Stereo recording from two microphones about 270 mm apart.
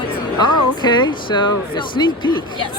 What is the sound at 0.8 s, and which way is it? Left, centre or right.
Speech, centre.